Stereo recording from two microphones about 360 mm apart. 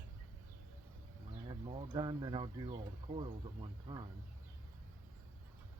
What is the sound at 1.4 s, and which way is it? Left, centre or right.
Speech, centre.